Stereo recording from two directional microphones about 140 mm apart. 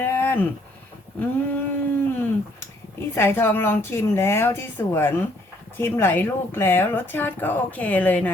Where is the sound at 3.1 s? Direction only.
15° left (ahead or behind).